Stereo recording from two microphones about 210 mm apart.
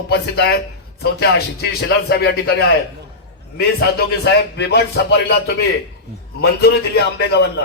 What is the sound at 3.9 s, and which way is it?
Speech, 55° left (ahead or behind).